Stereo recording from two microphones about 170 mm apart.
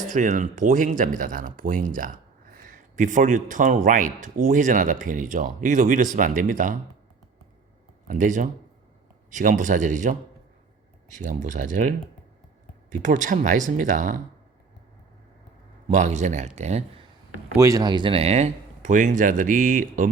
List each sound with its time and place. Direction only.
0.1 s speech: 50° right (ahead or behind)
8.0 s speech: 50° right (ahead or behind)
11.2 s speech: 50° right (ahead or behind)
15.9 s speech: 45° right (ahead or behind)
17.6 s speech: 20° right (ahead or behind); by 20.1 s 50° right (ahead or behind)